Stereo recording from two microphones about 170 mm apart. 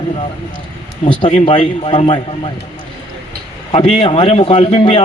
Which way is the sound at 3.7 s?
35° left (ahead or behind).